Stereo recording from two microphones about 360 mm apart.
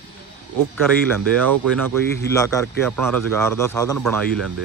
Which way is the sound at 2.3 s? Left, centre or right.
Centre.